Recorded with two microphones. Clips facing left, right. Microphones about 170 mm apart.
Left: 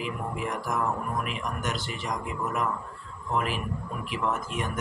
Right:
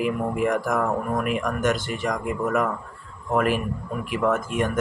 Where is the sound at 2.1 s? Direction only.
75° right (ahead or behind); by 4.3 s 50° right (ahead or behind).